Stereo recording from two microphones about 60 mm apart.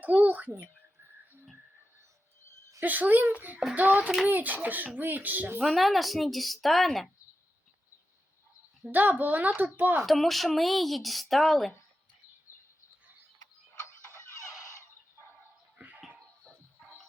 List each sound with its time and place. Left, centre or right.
0.0 s a child's voice: right
2.8 s a child's voice: right
5.5 s speech: centre
8.9 s a child's voice: right
10.0 s speech: centre